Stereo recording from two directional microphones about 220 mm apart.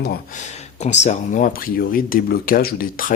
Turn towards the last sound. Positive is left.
turn(degrees=40)  # may be behind; listen again after turning